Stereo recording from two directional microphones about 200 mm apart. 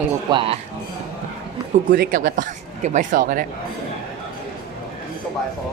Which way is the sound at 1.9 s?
45° right (ahead or behind).